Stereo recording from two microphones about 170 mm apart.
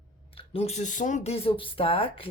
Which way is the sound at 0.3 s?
35° left (ahead or behind).